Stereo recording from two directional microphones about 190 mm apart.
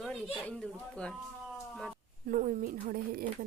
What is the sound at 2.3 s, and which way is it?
Speech, 45° right (ahead or behind).